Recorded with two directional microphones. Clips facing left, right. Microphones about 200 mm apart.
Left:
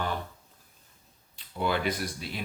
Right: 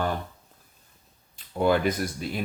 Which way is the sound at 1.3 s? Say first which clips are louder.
Right 7 dB; 45° right (ahead or behind).